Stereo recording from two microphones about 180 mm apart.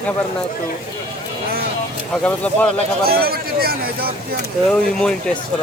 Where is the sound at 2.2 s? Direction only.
5° left (ahead or behind).